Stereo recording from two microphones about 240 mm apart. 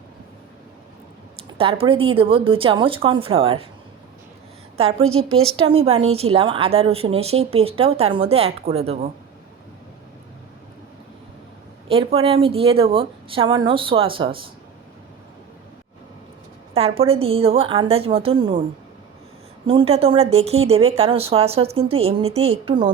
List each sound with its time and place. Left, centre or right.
1.5 s a woman's voice: right
4.8 s a woman's voice: right
11.9 s a woman's voice: right
16.7 s a woman's voice: right
19.6 s a woman's voice: right